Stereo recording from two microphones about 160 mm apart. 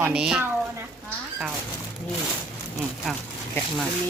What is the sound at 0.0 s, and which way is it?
Speech, 5° right (ahead or behind).